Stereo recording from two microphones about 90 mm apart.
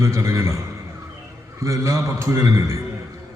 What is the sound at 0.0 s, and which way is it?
A man's voice, 35° right (ahead or behind).